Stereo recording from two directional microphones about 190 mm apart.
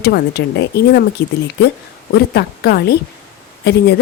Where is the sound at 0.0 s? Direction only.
60° left (ahead or behind).